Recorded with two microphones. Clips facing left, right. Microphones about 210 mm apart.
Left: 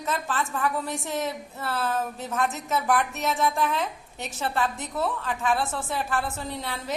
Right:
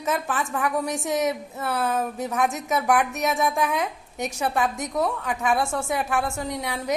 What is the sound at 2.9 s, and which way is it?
Speech, 15° right (ahead or behind).